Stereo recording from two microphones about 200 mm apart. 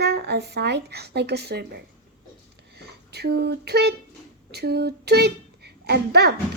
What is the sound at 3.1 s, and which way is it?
A woman's voice, 55° right (ahead or behind).